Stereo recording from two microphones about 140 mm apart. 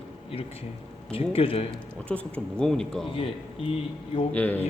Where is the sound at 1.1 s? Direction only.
40° left (ahead or behind).